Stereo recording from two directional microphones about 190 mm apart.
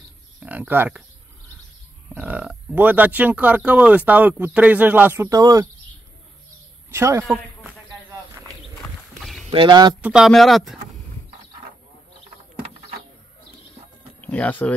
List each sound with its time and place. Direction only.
0.4 s speech: 10° right (ahead or behind)
2.1 s speech: 5° right (ahead or behind)
6.9 s a man's voice: 15° right (ahead or behind)
8.1 s a sound: 15° right (ahead or behind)
9.2 s rowboat: centre (ahead or behind)
9.5 s speech: 25° right (ahead or behind)
10.0 s speech: 5° right (ahead or behind)
14.2 s speech: 10° left (ahead or behind)